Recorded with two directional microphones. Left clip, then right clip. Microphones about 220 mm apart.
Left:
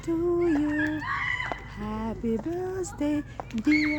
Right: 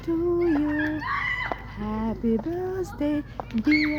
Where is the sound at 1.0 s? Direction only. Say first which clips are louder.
Right 2 dB; 50° right (ahead or behind).